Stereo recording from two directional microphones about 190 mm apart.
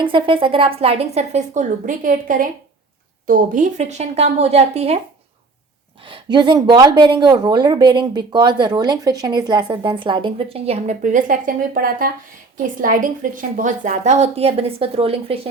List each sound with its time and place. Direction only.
0.0 s a woman's voice: 25° right (ahead or behind)
6.1 s a woman's voice: 25° right (ahead or behind)